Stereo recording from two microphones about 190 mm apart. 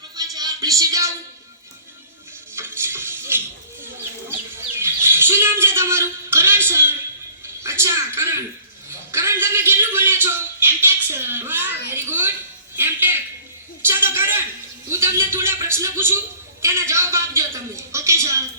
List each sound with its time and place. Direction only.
0.2 s a sound: 20° right (ahead or behind)
2.6 s music: 10° right (ahead or behind)
4.3 s chirp: 10° right (ahead or behind)
6.7 s a man's voice: 10° right (ahead or behind)